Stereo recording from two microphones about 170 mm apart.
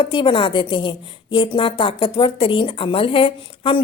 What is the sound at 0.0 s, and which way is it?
A woman's voice, 30° left (ahead or behind).